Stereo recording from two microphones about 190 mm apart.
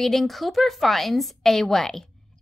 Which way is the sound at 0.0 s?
Centre (ahead or behind).